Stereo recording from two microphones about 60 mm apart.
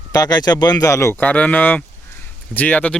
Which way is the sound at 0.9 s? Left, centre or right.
Left.